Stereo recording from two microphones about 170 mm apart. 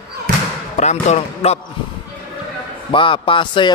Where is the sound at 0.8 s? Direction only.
40° left (ahead or behind).